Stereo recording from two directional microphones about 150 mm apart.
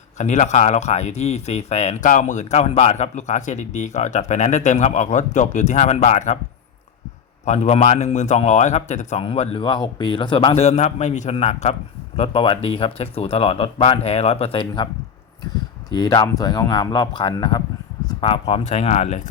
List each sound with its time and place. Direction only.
0.2 s speech: 50° left (ahead or behind)
7.4 s a man's voice: 50° left (ahead or behind)
15.9 s speech: 25° left (ahead or behind); by 19.3 s 50° left (ahead or behind)